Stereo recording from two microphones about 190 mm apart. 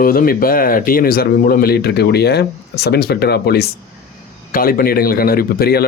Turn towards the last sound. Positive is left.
turn(degrees=55)  # may be behind; listen again after turning